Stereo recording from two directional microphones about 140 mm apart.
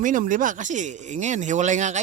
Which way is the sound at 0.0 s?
70° right (ahead or behind).